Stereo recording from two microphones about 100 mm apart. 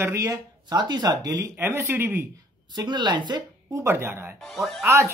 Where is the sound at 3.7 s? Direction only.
30° right (ahead or behind).